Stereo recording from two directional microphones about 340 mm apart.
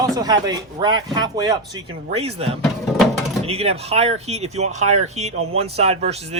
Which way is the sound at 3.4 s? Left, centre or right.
Centre.